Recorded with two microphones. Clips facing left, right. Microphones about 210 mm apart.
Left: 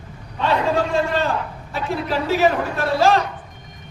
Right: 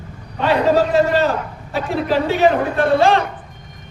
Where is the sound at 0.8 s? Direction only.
40° right (ahead or behind).